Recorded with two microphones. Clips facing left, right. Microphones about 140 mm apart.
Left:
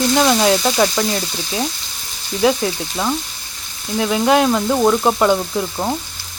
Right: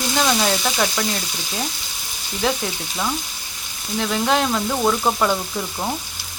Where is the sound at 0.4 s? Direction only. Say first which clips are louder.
Left 6 dB; 10° left (ahead or behind).